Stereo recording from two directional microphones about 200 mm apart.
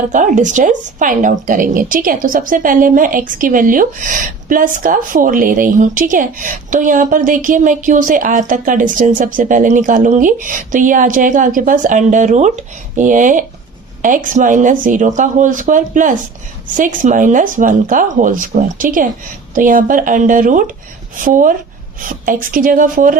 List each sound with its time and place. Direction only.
0.1 s speech: 40° right (ahead or behind)